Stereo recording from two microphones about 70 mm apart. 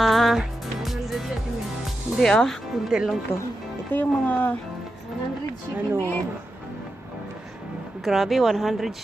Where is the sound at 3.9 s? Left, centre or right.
Left.